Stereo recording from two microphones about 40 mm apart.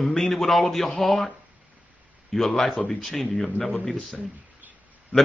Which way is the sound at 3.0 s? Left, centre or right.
Centre.